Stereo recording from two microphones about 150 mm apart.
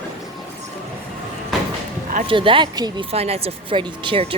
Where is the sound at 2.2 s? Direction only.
35° right (ahead or behind).